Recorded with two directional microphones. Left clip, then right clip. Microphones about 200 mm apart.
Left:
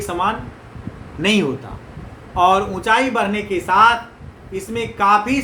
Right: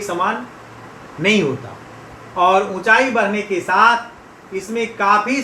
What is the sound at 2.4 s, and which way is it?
A man's voice, 30° left (ahead or behind).